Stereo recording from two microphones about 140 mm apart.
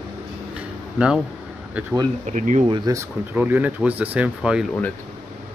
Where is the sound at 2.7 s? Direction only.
25° right (ahead or behind).